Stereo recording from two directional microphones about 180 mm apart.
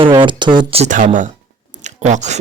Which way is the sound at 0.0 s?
25° right (ahead or behind).